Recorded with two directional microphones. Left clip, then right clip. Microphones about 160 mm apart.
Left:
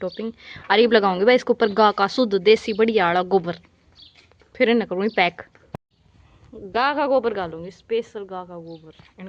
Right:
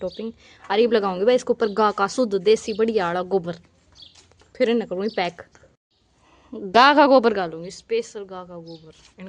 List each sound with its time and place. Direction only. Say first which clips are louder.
0.0 s speech: left 1 dB; 5° right (ahead or behind)
6.5 s speech: right 7 dB; 90° right
7.5 s speech: even; 20° right (ahead or behind); by 9.2 s 5° right (ahead or behind)